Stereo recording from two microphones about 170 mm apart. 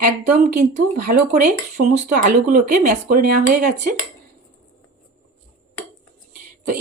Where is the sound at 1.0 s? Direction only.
50° right (ahead or behind).